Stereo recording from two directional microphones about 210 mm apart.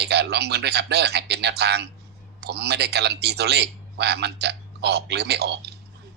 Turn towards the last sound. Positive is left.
turn(degrees=-50)  # may be behind; listen again after turning